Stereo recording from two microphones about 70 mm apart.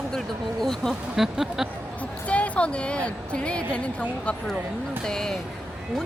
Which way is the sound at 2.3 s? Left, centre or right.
Centre.